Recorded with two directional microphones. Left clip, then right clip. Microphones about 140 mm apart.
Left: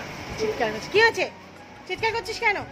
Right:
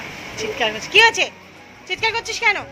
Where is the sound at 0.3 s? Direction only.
10° left (ahead or behind).